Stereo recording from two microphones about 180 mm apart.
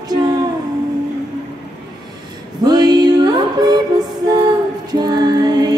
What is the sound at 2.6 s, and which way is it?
Music, 20° right (ahead or behind).